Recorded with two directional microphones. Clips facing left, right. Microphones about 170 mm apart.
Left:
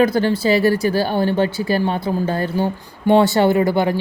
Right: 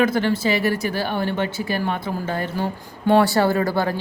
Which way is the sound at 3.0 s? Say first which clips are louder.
Left 3 dB; 20° left (ahead or behind).